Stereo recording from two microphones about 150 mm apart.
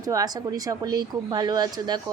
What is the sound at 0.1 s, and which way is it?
A woman's voice, 25° right (ahead or behind).